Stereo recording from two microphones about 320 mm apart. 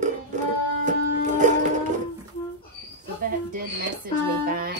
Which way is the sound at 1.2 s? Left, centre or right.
Right.